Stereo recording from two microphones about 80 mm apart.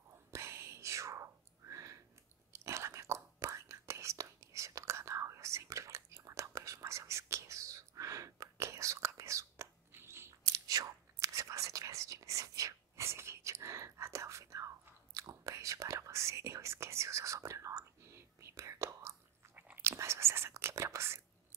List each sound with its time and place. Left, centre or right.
0.3 s whispering: right
10.7 s whispering: right